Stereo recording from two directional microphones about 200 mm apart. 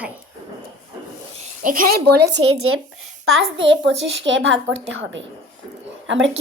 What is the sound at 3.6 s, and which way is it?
A woman's voice, 65° right (ahead or behind).